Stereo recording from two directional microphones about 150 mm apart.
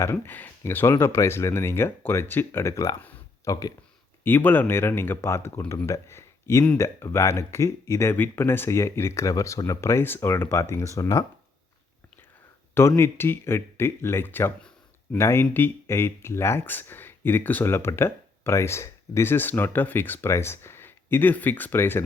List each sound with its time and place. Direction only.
0.0 s speech: 20° left (ahead or behind)
3.0 s a sound: 10° left (ahead or behind)
4.2 s speech: 15° left (ahead or behind)
13.0 s speech: 15° left (ahead or behind)